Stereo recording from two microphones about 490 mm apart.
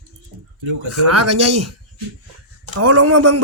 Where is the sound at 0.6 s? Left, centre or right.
Right.